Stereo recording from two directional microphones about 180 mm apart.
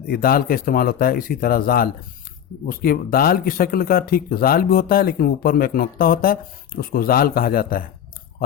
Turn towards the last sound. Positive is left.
turn(degrees=55)  # may be behind; listen again after turning